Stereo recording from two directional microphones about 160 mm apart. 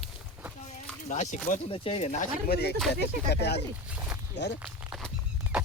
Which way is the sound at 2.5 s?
90° left.